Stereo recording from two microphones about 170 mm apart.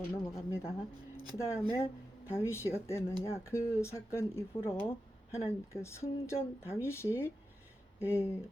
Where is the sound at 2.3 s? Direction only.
15° left (ahead or behind).